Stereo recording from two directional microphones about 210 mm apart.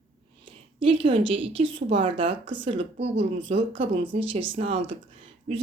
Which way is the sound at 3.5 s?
30° right (ahead or behind).